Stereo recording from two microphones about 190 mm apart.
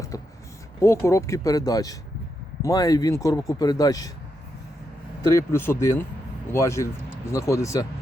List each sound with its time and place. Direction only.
0.1 s speech: 20° left (ahead or behind)
5.3 s speech: 15° left (ahead or behind)